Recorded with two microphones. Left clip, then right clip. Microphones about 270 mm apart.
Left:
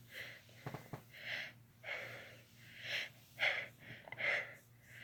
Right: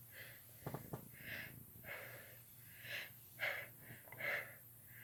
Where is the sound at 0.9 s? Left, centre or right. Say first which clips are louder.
Left 5 dB; left.